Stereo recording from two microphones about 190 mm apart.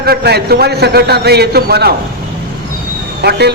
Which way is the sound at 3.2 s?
60° right (ahead or behind).